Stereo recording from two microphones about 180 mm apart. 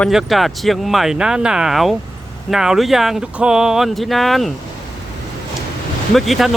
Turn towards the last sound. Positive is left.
turn(degrees=0)  # may be behind; listen again after turning